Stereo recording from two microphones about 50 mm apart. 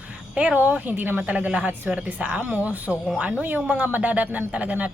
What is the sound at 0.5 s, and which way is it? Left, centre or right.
Speech, right.